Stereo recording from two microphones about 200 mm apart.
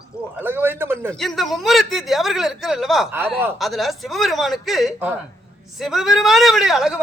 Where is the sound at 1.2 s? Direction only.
Centre (ahead or behind).